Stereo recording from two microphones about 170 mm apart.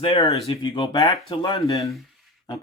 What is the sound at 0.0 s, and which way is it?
Speech, 35° left (ahead or behind).